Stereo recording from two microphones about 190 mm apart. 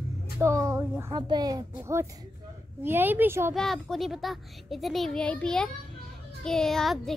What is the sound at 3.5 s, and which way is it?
A child's voice, centre (ahead or behind).